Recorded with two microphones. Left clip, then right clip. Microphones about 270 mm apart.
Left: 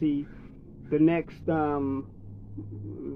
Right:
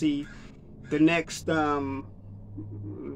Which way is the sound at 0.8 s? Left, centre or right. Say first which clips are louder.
Right 1 dB; centre.